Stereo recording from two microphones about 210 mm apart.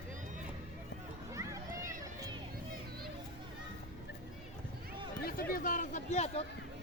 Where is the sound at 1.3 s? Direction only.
15° right (ahead or behind).